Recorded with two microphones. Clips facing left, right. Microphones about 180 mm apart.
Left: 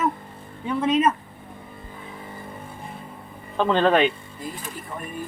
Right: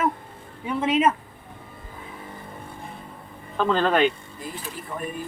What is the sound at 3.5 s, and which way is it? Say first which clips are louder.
Speech: left 2 dB; 25° left (ahead or behind).